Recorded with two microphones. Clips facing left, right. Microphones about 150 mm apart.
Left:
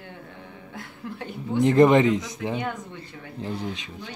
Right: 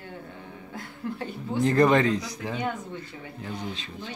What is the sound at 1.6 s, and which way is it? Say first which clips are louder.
Speech: left 4 dB; 20° left (ahead or behind).